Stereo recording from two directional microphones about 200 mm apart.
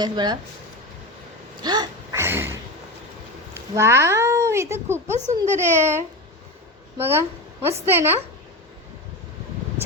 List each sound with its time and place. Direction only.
0.0 s speech: 20° right (ahead or behind)
1.6 s a sound: 20° right (ahead or behind)
3.8 s a child's voice: 15° right (ahead or behind)